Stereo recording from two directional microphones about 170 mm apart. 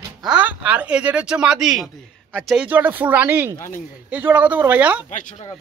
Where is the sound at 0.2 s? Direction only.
5° right (ahead or behind).